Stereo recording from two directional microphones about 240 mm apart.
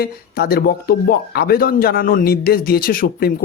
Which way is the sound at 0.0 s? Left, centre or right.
Left.